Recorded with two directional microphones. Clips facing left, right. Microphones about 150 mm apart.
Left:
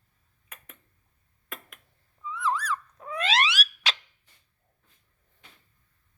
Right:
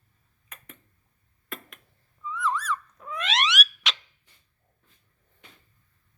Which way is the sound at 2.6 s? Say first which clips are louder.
Right 1 dB; 30° left (ahead or behind).